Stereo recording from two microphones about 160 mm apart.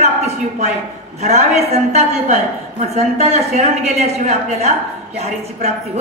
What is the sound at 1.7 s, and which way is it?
A woman's voice, 45° right (ahead or behind).